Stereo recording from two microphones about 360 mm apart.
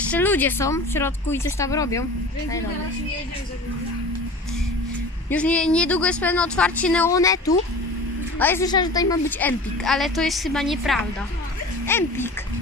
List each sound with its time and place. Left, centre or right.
0.1 s speech: centre
5.3 s a woman's voice: centre